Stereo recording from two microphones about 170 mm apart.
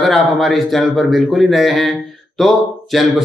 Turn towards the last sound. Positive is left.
turn(degrees=0)  # may be behind; listen again after turning